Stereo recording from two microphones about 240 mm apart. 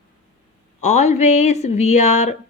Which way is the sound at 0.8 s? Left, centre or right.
Left.